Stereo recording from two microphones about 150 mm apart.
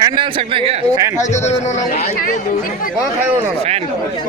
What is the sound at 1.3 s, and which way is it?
Speech, 50° left (ahead or behind).